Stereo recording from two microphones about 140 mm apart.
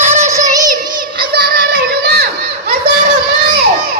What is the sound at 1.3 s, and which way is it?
Child singing, 90° right.